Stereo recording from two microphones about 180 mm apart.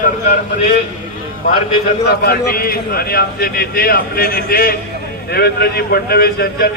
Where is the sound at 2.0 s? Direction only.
60° left (ahead or behind).